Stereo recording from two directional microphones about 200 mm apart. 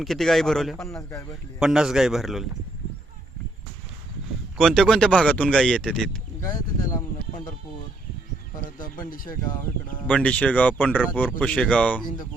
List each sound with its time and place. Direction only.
0.0 s speech: centre (ahead or behind)
0.9 s speech: 15° left (ahead or behind)
1.5 s speech: 5° right (ahead or behind)
4.5 s speech: centre (ahead or behind)
6.4 s speech: 20° left (ahead or behind)
8.8 s speech: 45° left (ahead or behind)
10.1 s speech: 5° left (ahead or behind)